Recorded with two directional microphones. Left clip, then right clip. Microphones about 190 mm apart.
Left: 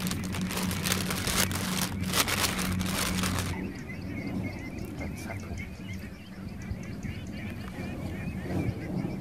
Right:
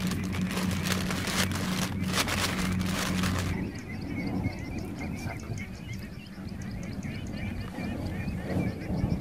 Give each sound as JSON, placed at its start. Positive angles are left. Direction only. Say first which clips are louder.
{"t": 0.0, "sound": "vehicle", "louder": "right 1 dB", "side_deg": 50}